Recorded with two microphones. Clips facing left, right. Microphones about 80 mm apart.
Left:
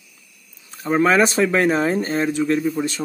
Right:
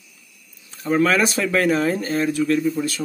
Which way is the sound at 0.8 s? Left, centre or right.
Left.